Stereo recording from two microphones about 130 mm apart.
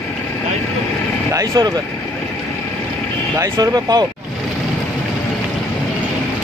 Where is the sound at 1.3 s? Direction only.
30° right (ahead or behind).